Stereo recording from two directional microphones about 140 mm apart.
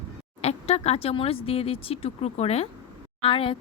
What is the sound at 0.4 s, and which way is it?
A woman's voice, 45° left (ahead or behind).